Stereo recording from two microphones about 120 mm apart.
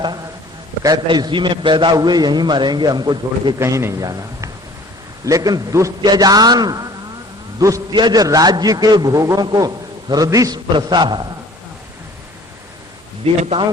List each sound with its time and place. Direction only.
0.0 s a man's voice: 35° right (ahead or behind)
3.6 s a man's voice: 20° right (ahead or behind)
7.9 s a man's voice: 35° right (ahead or behind)
13.2 s speech: 55° right (ahead or behind)